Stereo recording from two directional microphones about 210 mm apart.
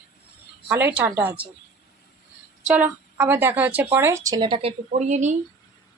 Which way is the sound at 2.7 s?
5° right (ahead or behind).